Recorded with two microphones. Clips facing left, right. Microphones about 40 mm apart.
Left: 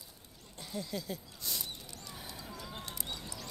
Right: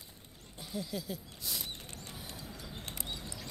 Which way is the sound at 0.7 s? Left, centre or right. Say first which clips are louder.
Even; centre.